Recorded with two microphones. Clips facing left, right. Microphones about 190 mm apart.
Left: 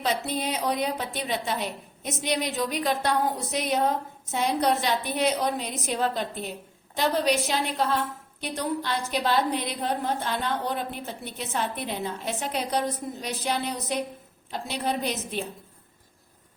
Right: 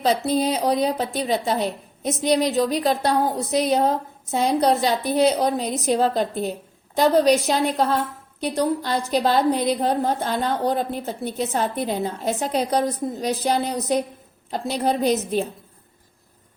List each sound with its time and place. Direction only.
0.0 s a woman's voice: 35° right (ahead or behind)